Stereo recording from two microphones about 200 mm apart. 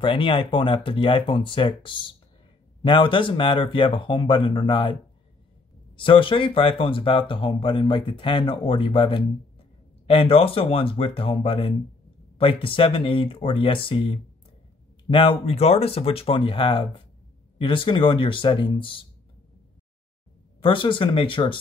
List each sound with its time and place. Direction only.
0.0 s speech: 25° left (ahead or behind)
5.9 s speech: 25° left (ahead or behind)
20.6 s speech: 25° left (ahead or behind)